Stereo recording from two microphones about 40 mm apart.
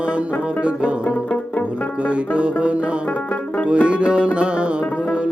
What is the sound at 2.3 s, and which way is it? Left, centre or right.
Music, right.